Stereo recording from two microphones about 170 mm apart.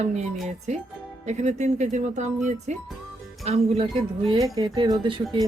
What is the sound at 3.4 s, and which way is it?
Music, 35° right (ahead or behind).